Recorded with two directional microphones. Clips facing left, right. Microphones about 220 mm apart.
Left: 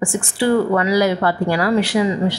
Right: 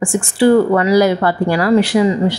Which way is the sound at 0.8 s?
45° right (ahead or behind).